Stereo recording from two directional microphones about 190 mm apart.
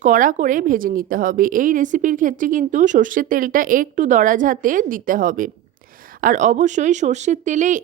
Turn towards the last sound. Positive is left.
turn(degrees=-40)  # may be behind; listen again after turning